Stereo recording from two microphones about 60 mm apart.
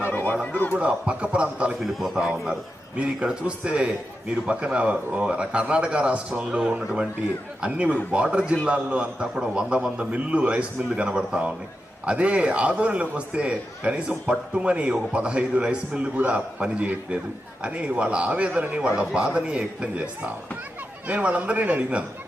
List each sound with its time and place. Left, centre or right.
0.1 s a sound: left
0.7 s a man's voice: right
1.8 s a man's voice: centre
3.2 s a man's voice: centre
21.1 s a man's voice: right